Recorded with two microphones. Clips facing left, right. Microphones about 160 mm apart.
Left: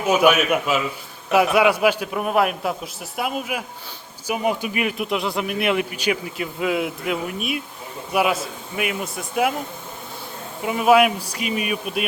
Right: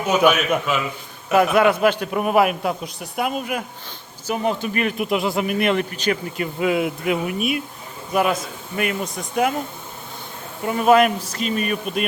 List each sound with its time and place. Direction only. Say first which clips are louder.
0.0 s speech: even; 10° left (ahead or behind)
10.6 s speech: right 1 dB; 5° left (ahead or behind)